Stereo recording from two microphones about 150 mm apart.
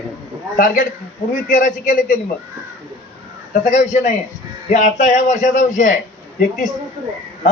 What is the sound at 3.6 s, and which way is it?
A man's voice, 50° left (ahead or behind).